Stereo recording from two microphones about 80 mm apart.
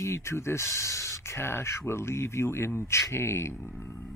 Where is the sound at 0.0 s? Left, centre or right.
Left.